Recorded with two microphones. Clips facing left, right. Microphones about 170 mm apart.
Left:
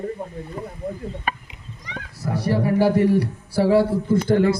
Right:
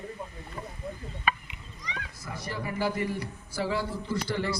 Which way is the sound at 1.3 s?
45° left (ahead or behind).